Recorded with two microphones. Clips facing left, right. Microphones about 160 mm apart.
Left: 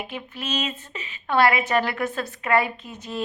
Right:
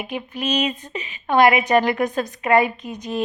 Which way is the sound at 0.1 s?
15° right (ahead or behind).